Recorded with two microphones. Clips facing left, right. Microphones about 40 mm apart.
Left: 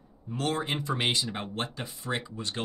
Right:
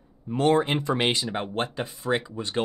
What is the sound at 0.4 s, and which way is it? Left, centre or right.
Speech, right.